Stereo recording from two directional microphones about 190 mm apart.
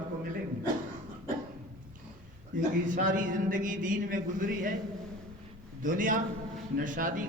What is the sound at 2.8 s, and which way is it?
Speech, 40° right (ahead or behind).